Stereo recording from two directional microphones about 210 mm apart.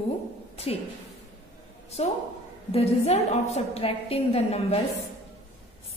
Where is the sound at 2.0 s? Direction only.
30° left (ahead or behind).